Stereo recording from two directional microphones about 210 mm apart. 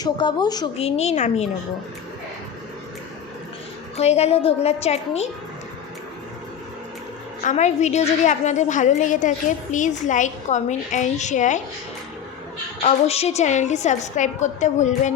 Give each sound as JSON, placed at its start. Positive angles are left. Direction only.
{"t": 0.0, "sound": "a woman's voice", "side_deg": 20}
{"t": 3.9, "sound": "a woman's voice", "side_deg": 30}
{"t": 7.4, "sound": "a woman's voice", "side_deg": 35}
{"t": 12.8, "sound": "a woman's voice", "side_deg": 30}